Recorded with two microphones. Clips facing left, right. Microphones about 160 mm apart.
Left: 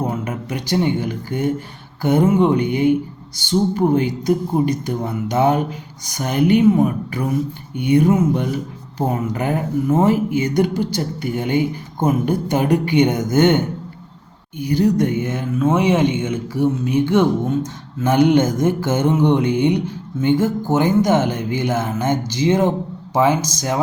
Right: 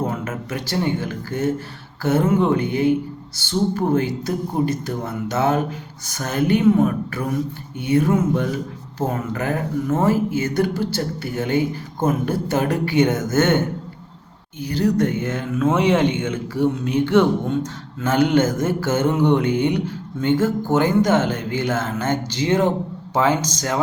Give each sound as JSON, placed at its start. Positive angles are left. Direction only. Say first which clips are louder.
{"t": 0.0, "sound": "a sound", "louder": "left 2 dB", "side_deg": 15}
{"t": 0.9, "sound": "speech", "louder": "left 2 dB", "side_deg": 15}
{"t": 14.6, "sound": "speech", "louder": "left 3 dB", "side_deg": 15}